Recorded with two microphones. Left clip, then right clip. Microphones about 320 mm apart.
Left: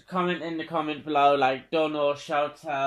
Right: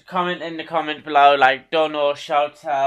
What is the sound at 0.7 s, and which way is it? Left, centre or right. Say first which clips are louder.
A man's voice: right 7 dB; right.